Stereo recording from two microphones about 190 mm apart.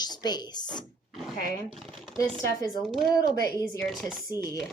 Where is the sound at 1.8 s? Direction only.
30° right (ahead or behind).